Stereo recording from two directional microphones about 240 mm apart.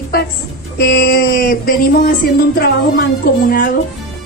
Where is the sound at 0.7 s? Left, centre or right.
Left.